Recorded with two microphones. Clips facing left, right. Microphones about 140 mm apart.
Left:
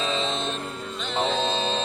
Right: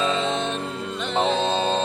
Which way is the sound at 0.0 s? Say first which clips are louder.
Right 4 dB; 55° right (ahead or behind).